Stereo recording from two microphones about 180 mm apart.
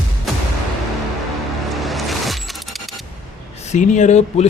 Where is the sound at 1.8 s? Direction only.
Centre (ahead or behind).